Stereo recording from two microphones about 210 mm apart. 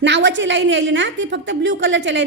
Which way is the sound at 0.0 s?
60° right (ahead or behind).